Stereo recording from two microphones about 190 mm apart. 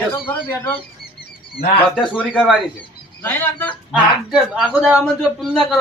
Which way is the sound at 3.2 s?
10° left (ahead or behind).